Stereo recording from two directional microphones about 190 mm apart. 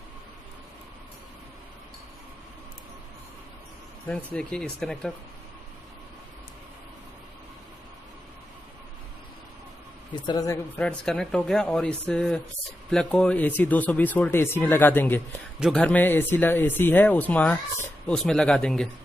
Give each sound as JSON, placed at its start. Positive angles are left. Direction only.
{"t": 4.1, "sound": "speech", "side_deg": 5}
{"t": 10.2, "sound": "speech", "side_deg": 20}
{"t": 10.8, "sound": "speech", "side_deg": 5}